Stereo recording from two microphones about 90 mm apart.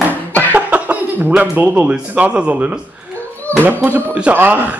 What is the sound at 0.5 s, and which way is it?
Speech, 15° right (ahead or behind).